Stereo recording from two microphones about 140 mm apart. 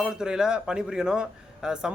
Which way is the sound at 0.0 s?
5° right (ahead or behind).